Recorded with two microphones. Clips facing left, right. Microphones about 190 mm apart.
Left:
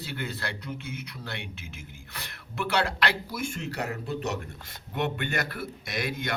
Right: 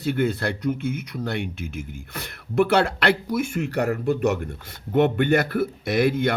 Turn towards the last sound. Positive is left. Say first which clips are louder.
# right 11 dB
turn(degrees=-55)  # may be behind; listen again after turning